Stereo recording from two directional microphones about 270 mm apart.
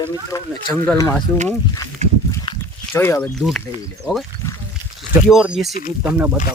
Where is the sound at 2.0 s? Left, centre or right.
Right.